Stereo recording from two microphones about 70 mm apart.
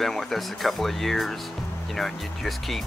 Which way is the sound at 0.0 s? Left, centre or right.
Centre.